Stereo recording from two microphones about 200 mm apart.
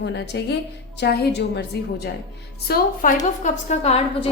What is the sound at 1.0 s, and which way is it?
Speech, 55° left (ahead or behind).